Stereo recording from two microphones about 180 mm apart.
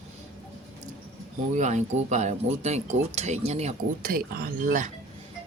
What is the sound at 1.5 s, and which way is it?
Speech, 40° right (ahead or behind).